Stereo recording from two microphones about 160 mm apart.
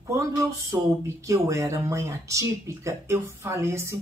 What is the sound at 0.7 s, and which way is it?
Speech, 20° right (ahead or behind).